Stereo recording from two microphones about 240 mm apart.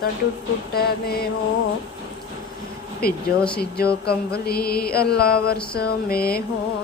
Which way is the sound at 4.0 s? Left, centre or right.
Left.